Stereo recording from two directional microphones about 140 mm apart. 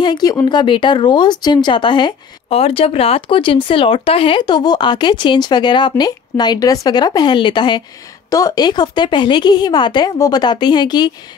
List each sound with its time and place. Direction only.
0.0 s speech: 30° left (ahead or behind)